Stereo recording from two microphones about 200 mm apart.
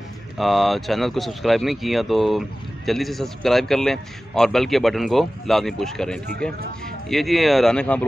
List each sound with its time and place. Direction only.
0.4 s speech: centre (ahead or behind)